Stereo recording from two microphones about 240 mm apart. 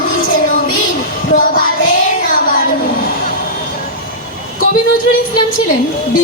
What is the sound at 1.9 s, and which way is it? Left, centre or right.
Child singing, left.